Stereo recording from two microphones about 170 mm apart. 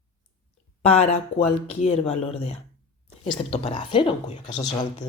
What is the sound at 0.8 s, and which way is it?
Speech, 40° left (ahead or behind).